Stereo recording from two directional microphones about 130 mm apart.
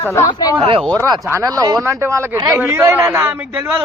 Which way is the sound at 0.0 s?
25° left (ahead or behind).